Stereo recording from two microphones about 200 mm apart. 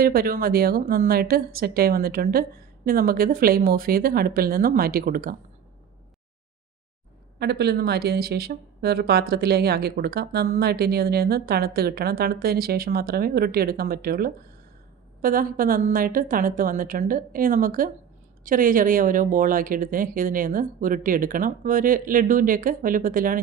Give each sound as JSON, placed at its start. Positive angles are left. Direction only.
{"t": 0.0, "sound": "a woman's voice", "side_deg": -50}
{"t": 7.3, "sound": "a woman's voice", "side_deg": -55}